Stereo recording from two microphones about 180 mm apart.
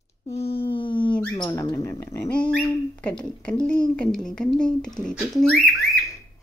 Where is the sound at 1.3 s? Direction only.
15° left (ahead or behind).